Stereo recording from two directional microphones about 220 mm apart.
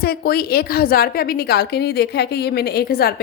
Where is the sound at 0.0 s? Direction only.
45° left (ahead or behind).